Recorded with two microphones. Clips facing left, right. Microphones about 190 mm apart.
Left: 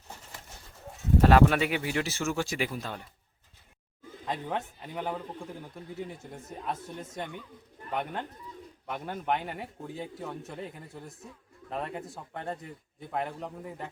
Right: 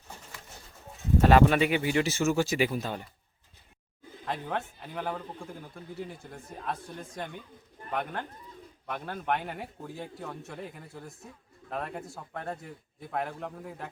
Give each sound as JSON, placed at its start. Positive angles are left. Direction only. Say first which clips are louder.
{"t": 1.2, "sound": "speech", "louder": "right 1 dB", "side_deg": 0}
{"t": 4.3, "sound": "speech", "louder": "even", "side_deg": 10}
{"t": 5.7, "sound": "speech", "louder": "even", "side_deg": 20}
{"t": 8.9, "sound": "speech", "louder": "even", "side_deg": 10}
{"t": 9.5, "sound": "speech", "louder": "left 1 dB", "side_deg": 0}